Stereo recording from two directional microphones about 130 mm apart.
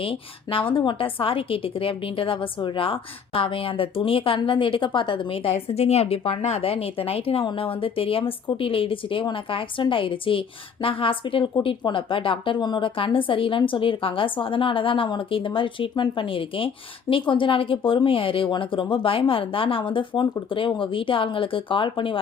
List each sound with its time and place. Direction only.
0.0 s a woman's voice: 45° left (ahead or behind)